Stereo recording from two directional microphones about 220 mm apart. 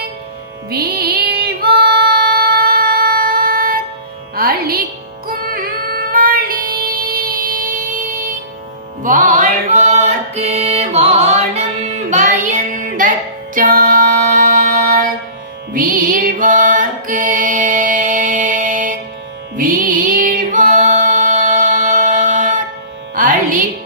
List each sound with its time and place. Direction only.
0.7 s music: 45° right (ahead or behind)